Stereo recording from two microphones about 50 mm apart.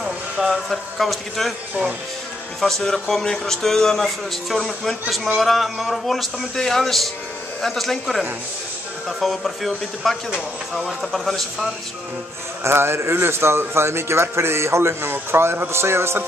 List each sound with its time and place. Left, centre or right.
0.0 s speech: centre
2.6 s speech: centre
12.6 s a man's voice: right